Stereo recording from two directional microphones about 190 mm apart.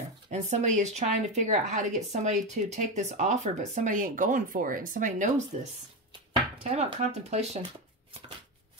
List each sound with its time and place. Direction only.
0.3 s speech: 40° right (ahead or behind)